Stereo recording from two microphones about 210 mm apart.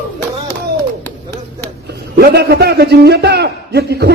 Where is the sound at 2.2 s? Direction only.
50° right (ahead or behind).